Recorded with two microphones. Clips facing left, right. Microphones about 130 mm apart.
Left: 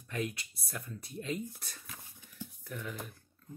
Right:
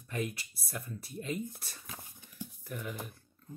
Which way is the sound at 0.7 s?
Centre (ahead or behind).